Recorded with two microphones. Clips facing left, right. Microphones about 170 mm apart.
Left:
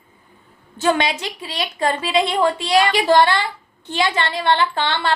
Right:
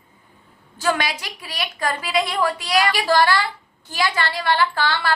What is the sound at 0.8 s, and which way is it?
A woman's voice, 25° left (ahead or behind).